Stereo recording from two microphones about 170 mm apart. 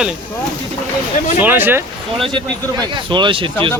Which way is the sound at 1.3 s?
10° right (ahead or behind).